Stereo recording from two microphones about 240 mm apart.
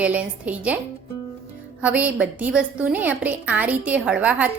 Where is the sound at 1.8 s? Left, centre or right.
Centre.